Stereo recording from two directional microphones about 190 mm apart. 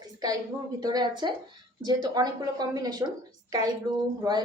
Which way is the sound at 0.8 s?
20° right (ahead or behind).